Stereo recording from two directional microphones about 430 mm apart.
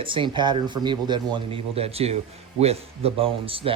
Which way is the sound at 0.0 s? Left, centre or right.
Centre.